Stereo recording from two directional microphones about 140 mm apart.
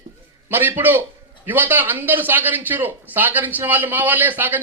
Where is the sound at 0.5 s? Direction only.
15° right (ahead or behind).